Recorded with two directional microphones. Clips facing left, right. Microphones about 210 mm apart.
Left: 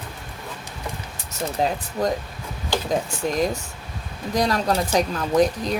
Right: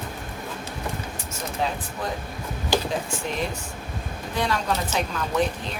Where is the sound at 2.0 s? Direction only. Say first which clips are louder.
Left 8 dB; 40° left (ahead or behind).